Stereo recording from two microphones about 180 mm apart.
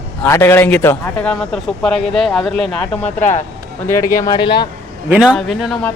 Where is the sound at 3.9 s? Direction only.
15° left (ahead or behind).